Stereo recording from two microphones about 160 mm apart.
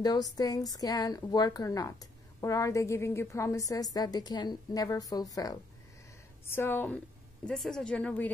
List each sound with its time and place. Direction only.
0.0 s a woman's voice: 25° left (ahead or behind)
7.4 s a woman's voice: 5° left (ahead or behind)